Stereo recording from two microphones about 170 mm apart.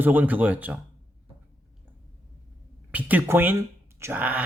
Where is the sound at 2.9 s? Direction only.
10° right (ahead or behind).